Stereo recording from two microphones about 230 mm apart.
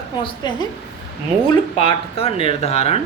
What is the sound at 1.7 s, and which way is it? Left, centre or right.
Speech, left.